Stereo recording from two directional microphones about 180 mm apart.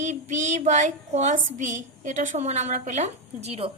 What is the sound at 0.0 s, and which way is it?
A woman's voice, 40° right (ahead or behind).